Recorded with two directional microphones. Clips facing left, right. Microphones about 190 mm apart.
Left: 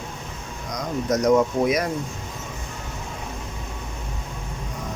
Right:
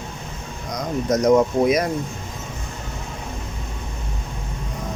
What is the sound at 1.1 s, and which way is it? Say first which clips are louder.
Speech: right 2 dB; 20° right (ahead or behind).